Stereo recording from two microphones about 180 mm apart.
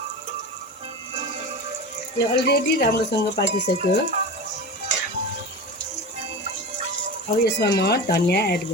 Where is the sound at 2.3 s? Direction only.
65° left (ahead or behind).